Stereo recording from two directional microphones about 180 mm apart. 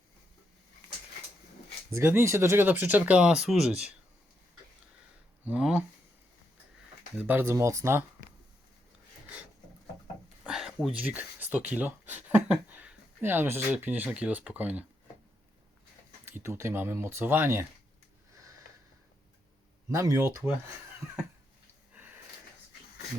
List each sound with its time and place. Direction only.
1.9 s speech: 15° right (ahead or behind)
5.5 s speech: 5° right (ahead or behind)
7.2 s speech: 10° right (ahead or behind)
10.4 s speech: centre (ahead or behind)
16.2 s speech: 15° right (ahead or behind)
19.9 s speech: 20° right (ahead or behind)